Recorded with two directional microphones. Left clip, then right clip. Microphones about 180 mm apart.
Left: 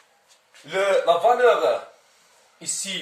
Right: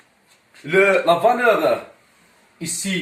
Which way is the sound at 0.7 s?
15° left (ahead or behind).